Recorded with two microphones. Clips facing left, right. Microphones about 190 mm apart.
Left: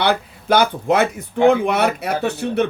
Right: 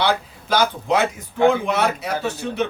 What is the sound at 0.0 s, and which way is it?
Speech, 55° left (ahead or behind).